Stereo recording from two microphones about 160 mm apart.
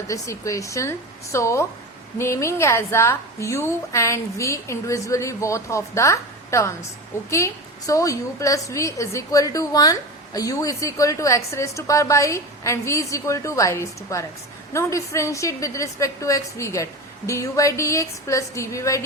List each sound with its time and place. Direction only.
0.1 s a woman's voice: 20° left (ahead or behind)